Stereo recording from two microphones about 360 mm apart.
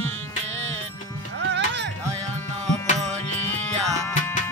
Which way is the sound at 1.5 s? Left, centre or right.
Right.